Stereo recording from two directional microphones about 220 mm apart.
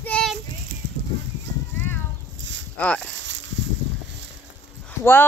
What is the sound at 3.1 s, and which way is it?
Snake, 55° right (ahead or behind).